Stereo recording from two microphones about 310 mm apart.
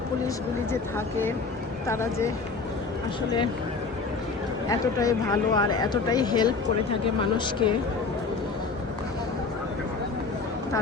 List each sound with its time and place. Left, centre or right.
0.7 s speech: centre
4.7 s speech: centre